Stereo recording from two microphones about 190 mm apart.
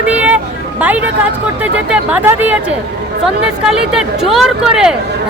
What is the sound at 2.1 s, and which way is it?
Speech, 10° right (ahead or behind).